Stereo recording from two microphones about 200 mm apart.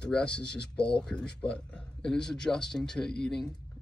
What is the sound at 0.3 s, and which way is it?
Speech, 55° left (ahead or behind).